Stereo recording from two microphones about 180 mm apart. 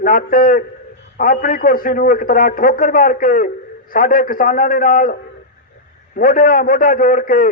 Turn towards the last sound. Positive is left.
turn(degrees=50)  # may be behind; listen again after turning